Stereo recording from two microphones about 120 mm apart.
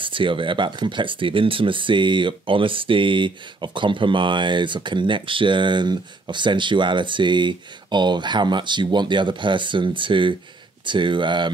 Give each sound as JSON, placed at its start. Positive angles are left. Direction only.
{"t": 0.0, "sound": "speech", "side_deg": -45}